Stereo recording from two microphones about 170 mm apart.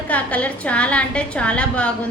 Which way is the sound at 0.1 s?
10° left (ahead or behind).